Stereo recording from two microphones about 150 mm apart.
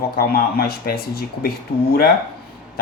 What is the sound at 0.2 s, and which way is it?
Speech, 85° left.